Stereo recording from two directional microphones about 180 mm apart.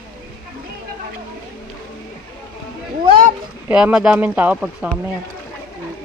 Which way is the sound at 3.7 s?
5° right (ahead or behind).